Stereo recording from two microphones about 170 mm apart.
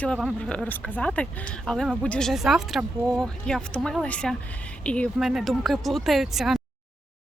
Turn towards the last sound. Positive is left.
turn(degrees=0)  # may be behind; listen again after turning